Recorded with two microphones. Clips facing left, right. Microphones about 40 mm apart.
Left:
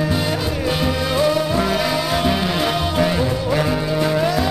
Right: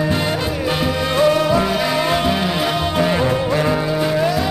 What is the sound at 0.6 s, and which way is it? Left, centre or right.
Music, centre.